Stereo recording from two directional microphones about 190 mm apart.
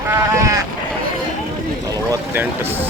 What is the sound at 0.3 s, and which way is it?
Sheep, 15° right (ahead or behind).